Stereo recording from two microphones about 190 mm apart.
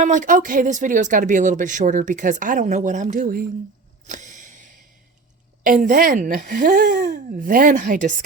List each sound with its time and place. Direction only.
0.0 s speech: 40° right (ahead or behind)
4.0 s a sound: 40° right (ahead or behind)
5.8 s speech: 45° right (ahead or behind)